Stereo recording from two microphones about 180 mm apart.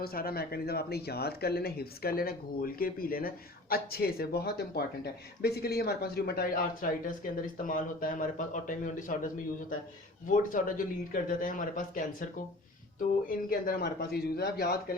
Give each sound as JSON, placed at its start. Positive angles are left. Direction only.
{"t": 0.0, "sound": "speech", "side_deg": 55}
{"t": 13.2, "sound": "speech", "side_deg": 55}